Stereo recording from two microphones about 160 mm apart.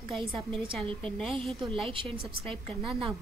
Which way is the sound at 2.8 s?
Centre (ahead or behind).